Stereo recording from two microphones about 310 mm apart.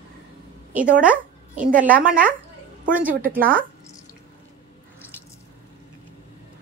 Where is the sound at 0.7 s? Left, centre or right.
Centre.